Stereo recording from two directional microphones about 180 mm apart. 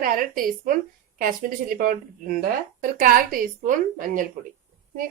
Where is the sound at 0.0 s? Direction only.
50° right (ahead or behind).